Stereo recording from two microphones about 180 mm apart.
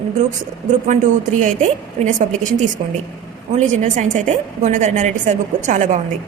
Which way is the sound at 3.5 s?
40° right (ahead or behind).